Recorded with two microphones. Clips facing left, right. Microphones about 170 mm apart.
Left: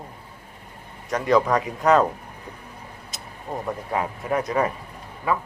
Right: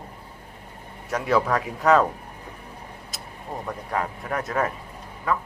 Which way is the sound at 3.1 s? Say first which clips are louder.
Even; centre (ahead or behind).